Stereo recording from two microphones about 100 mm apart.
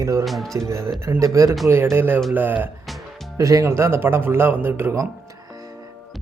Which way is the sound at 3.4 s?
35° right (ahead or behind).